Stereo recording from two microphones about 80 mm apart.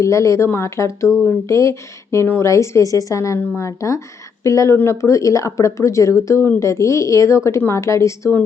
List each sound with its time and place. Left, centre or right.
0.0 s speech: left